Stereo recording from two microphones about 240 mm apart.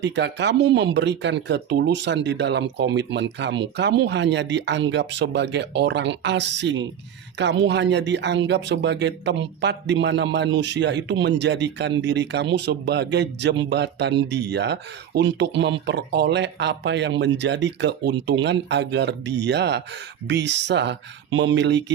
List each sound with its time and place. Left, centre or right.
0.0 s speech: right